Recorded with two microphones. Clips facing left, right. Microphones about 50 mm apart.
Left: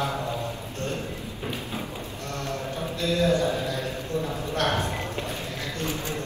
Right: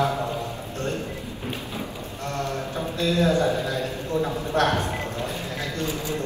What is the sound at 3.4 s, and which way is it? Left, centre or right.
Music, right.